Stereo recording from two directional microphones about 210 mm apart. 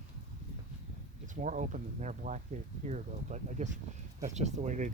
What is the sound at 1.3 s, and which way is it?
Speech, 35° right (ahead or behind).